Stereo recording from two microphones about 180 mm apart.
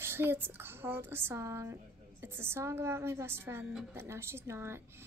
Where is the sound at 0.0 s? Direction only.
15° right (ahead or behind).